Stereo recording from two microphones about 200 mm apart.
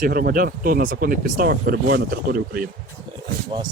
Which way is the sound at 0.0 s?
45° right (ahead or behind).